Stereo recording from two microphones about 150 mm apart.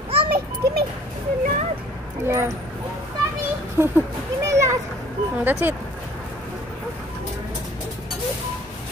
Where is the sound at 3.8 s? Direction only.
15° right (ahead or behind).